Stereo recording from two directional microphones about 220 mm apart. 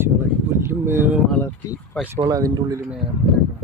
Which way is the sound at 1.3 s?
5° left (ahead or behind).